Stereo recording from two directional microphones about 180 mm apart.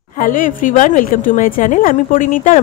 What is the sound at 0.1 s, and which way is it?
A woman's voice, 50° left (ahead or behind).